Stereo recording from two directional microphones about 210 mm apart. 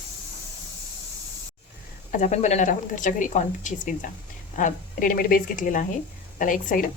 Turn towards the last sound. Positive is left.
turn(degrees=40)  # may be behind; listen again after turning